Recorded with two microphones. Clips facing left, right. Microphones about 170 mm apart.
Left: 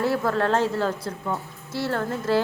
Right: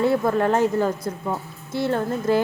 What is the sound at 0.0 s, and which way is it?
A woman's voice, 20° right (ahead or behind).